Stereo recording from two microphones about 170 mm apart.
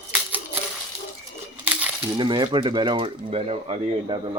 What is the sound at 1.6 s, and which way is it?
Crumpling, 10° right (ahead or behind).